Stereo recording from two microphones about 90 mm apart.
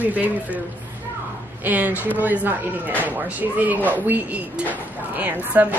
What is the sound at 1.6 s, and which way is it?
A woman's voice, 20° right (ahead or behind).